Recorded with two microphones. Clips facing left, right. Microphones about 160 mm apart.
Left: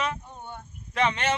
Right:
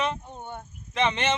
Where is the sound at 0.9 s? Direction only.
20° right (ahead or behind).